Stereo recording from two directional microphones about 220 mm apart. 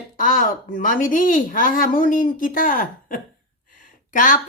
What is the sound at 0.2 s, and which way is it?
Speech, 40° left (ahead or behind).